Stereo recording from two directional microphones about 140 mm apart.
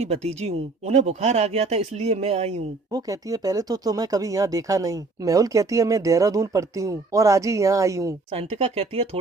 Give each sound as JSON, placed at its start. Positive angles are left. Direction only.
{"t": 0.0, "sound": "speech", "side_deg": -50}
{"t": 2.9, "sound": "speech", "side_deg": -25}
{"t": 8.3, "sound": "speech", "side_deg": -45}